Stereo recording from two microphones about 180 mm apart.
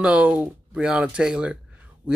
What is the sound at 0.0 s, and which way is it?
Speech, 5° right (ahead or behind).